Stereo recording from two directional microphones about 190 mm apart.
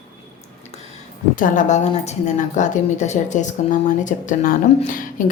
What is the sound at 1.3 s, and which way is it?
A woman's voice, 45° left (ahead or behind).